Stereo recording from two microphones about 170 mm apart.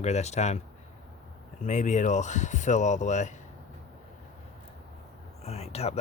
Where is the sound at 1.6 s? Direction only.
45° left (ahead or behind).